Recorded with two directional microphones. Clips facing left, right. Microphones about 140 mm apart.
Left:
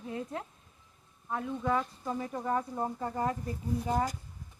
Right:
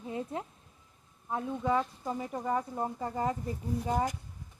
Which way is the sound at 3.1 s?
20° right (ahead or behind).